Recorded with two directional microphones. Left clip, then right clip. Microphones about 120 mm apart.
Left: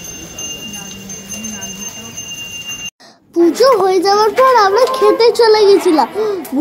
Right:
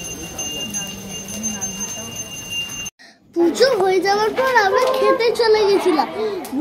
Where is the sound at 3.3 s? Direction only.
35° left (ahead or behind).